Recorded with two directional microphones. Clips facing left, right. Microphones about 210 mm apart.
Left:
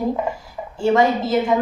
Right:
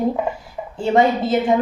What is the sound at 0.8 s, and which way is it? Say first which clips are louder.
Speech: even; 25° right (ahead or behind).